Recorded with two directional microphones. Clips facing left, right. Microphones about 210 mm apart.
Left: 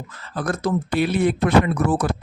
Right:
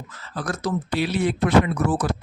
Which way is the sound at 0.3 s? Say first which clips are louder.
Left 3 dB; 55° left (ahead or behind).